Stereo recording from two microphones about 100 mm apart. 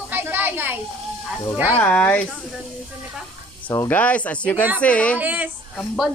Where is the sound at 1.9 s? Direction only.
15° left (ahead or behind).